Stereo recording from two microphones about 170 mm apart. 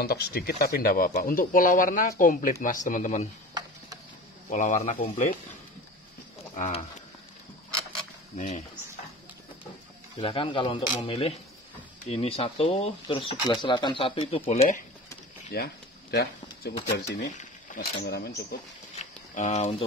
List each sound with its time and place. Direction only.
0.0 s speech: 65° left (ahead or behind); by 3.3 s 50° left (ahead or behind)
4.5 s speech: 45° left (ahead or behind)
6.5 s speech: 45° left (ahead or behind)
8.4 s speech: 40° left (ahead or behind)
10.2 s speech: 30° left (ahead or behind)
15.5 s speech: 70° left (ahead or behind)
17.3 s a sound: 45° left (ahead or behind)
18.0 s speech: 70° left (ahead or behind)
19.3 s speech: 45° left (ahead or behind)